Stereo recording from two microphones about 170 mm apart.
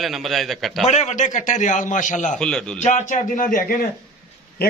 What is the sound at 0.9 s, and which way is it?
A man's voice, 45° left (ahead or behind).